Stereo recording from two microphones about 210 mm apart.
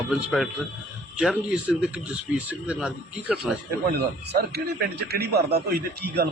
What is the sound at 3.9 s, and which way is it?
A man's voice, 50° right (ahead or behind).